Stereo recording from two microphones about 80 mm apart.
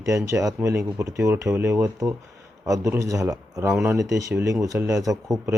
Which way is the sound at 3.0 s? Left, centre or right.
Right.